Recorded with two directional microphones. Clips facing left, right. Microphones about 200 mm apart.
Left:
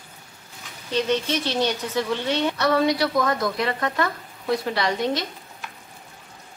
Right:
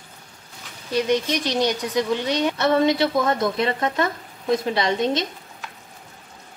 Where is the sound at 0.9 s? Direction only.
15° right (ahead or behind).